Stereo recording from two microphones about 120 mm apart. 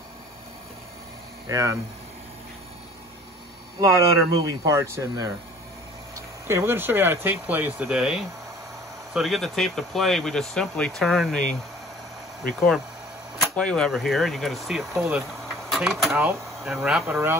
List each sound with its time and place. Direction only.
1.5 s speech: 25° right (ahead or behind)
4.4 s speech: 30° right (ahead or behind); by 17.2 s 5° right (ahead or behind)